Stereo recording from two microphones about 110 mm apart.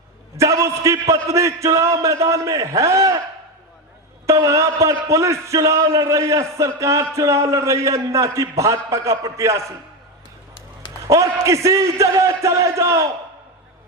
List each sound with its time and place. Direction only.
0.3 s a man's voice: 30° right (ahead or behind)
4.3 s a man's voice: 30° right (ahead or behind)
11.1 s a man's voice: 30° right (ahead or behind)